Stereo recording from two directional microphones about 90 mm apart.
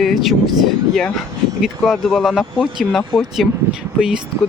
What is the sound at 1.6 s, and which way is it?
Speech, 5° right (ahead or behind).